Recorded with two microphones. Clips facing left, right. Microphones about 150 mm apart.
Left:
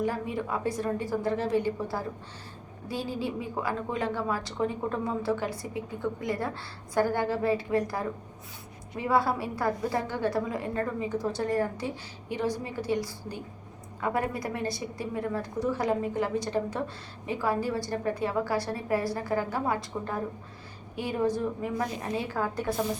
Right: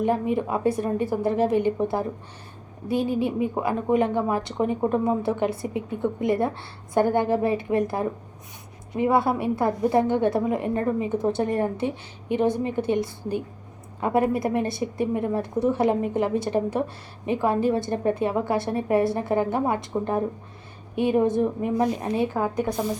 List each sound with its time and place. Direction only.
0.0 s a woman's voice: 20° right (ahead or behind)
20.9 s a woman's voice: 20° right (ahead or behind)